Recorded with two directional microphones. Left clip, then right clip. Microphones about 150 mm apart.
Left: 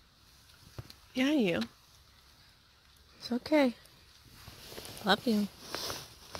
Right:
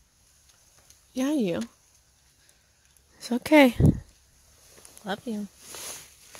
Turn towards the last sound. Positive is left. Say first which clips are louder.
# left 5 dB
turn(degrees=5)  # may be behind; listen again after turning